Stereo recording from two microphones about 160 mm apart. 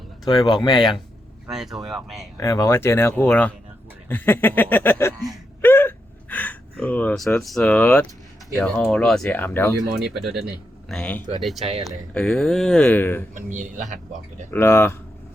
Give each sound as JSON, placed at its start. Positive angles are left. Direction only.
{"t": 0.5, "sound": "speech", "side_deg": 25}
{"t": 0.8, "sound": "speech", "side_deg": 0}
{"t": 2.4, "sound": "speech", "side_deg": 20}
{"t": 5.6, "sound": "gasp", "side_deg": 15}
{"t": 7.4, "sound": "speech", "side_deg": 5}
{"t": 10.2, "sound": "speech", "side_deg": 0}
{"t": 13.3, "sound": "speech", "side_deg": -50}
{"t": 14.5, "sound": "speech", "side_deg": 15}